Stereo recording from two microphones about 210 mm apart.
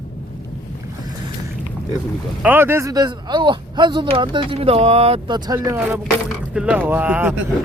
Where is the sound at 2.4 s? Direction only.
10° right (ahead or behind).